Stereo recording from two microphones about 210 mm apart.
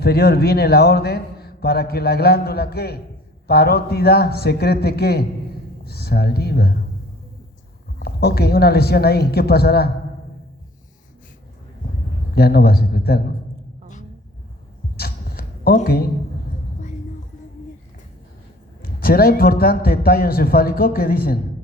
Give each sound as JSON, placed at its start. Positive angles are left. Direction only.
{"t": 0.0, "sound": "a man's voice", "side_deg": 45}
{"t": 7.9, "sound": "a man's voice", "side_deg": 50}
{"t": 12.3, "sound": "a man's voice", "side_deg": 50}
{"t": 14.9, "sound": "a sound", "side_deg": 45}
{"t": 18.8, "sound": "a man's voice", "side_deg": 45}